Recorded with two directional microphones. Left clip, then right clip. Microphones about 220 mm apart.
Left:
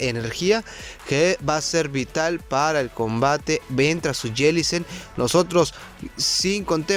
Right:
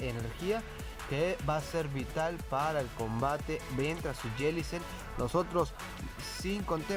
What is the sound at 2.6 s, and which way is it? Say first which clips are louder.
Speech: left 12 dB; 35° left (ahead or behind).